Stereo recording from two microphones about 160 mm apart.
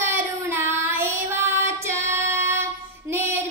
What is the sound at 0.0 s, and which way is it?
Child singing, 15° right (ahead or behind).